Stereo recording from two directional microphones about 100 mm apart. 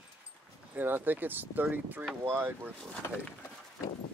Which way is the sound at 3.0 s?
25° left (ahead or behind).